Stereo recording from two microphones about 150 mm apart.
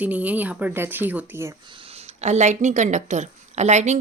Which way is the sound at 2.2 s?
50° right (ahead or behind).